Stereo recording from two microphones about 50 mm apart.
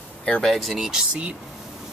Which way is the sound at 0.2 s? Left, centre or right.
Centre.